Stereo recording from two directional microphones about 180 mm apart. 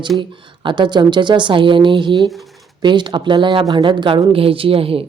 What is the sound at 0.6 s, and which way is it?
Speech, 25° right (ahead or behind).